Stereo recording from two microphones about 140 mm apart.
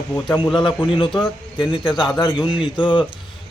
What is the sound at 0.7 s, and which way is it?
Speech, 35° left (ahead or behind).